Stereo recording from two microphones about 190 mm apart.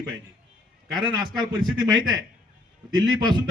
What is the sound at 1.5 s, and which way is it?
A man's voice, 25° right (ahead or behind).